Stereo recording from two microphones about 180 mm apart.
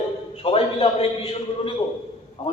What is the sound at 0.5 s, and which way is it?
Speech, 35° left (ahead or behind).